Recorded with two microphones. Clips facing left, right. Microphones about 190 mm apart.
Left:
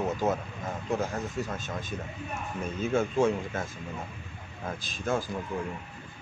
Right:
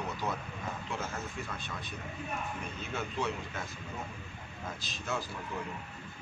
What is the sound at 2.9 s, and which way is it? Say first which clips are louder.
Speech: left 10 dB; 50° left (ahead or behind).